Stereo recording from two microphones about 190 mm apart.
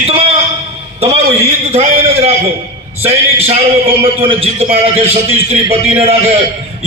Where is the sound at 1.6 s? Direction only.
30° right (ahead or behind).